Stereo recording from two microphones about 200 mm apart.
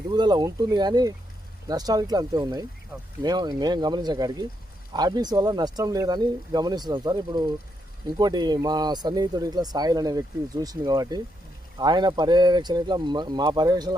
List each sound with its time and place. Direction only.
0.1 s speech: 20° right (ahead or behind)